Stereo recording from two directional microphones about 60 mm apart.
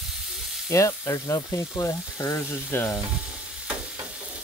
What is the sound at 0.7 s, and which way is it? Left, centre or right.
Speech, left.